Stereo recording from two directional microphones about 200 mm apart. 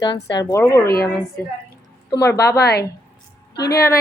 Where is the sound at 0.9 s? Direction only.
50° left (ahead or behind).